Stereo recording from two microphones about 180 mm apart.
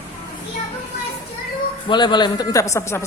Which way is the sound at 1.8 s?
25° left (ahead or behind).